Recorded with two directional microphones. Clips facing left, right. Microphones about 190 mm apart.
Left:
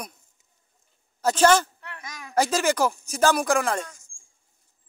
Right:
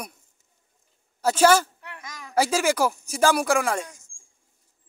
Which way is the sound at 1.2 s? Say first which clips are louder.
Right 1 dB; 10° right (ahead or behind).